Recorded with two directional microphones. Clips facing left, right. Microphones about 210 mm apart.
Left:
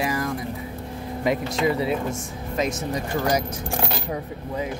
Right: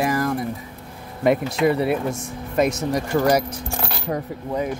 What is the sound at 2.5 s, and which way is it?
Speech, 60° right (ahead or behind).